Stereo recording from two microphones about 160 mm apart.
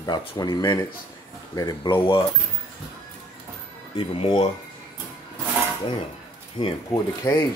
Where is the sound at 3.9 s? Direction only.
35° left (ahead or behind).